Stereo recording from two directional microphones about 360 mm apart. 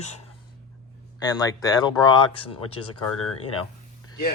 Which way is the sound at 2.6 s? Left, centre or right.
Left.